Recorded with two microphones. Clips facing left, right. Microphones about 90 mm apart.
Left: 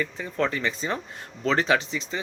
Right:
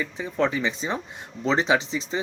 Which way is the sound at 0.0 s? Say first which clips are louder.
Right 2 dB; 15° right (ahead or behind).